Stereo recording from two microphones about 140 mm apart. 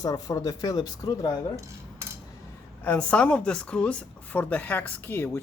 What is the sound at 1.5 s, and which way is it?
Cutlery, 20° right (ahead or behind).